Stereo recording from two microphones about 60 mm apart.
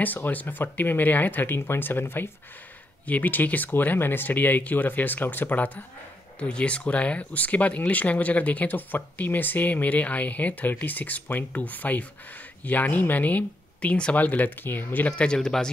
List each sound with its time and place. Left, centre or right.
0.0 s speech: left
15.0 s speech: centre